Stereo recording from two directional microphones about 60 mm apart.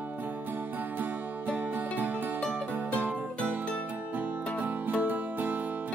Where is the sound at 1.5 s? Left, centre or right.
Right.